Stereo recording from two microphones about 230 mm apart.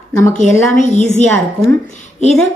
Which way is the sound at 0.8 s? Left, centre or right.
Left.